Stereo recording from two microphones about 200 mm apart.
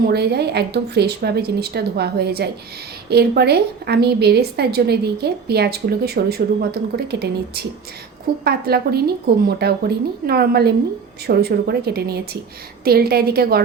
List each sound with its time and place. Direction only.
0.0 s a woman's voice: 55° right (ahead or behind)